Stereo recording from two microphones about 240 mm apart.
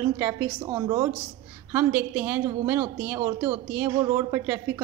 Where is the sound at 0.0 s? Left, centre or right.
Centre.